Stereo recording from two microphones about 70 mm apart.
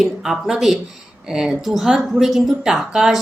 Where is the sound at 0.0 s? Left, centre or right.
Centre.